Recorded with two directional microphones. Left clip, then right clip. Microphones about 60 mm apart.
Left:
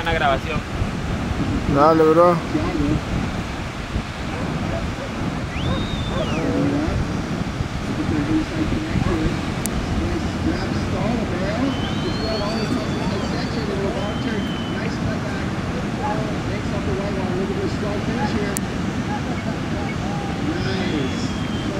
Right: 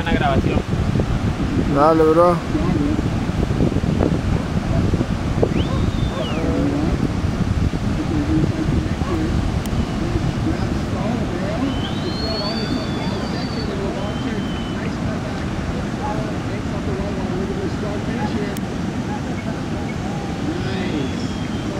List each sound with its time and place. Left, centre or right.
0.1 s speech: left
1.8 s speech: centre